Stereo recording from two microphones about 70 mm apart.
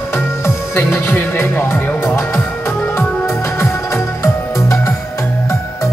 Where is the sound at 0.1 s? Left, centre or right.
Left.